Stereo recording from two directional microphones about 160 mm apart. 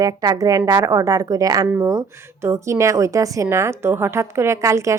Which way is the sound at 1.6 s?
10° right (ahead or behind).